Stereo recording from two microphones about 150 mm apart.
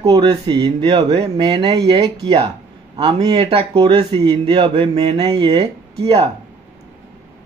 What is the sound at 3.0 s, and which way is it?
Speech, 35° right (ahead or behind).